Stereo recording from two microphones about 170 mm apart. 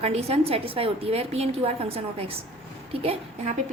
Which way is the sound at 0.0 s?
35° right (ahead or behind).